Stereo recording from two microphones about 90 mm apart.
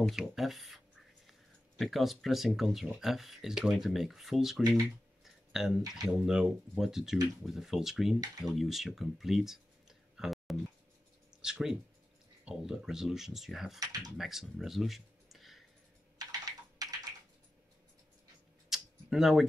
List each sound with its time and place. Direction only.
0.1 s a sound: centre (ahead or behind)
1.8 s speech: centre (ahead or behind)
5.2 s a sound: 5° right (ahead or behind)
6.1 s speech: 5° right (ahead or behind)
13.7 s speech: 45° right (ahead or behind)
14.1 s speech: 5° right (ahead or behind)
16.2 s computer keyboard: 45° right (ahead or behind)
18.7 s computer keyboard: 5° right (ahead or behind)